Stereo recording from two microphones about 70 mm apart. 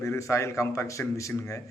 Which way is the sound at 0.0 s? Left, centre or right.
Left.